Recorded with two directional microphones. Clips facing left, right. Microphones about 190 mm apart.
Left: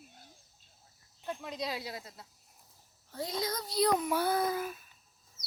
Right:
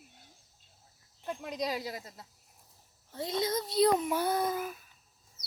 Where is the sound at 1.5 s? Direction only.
40° right (ahead or behind).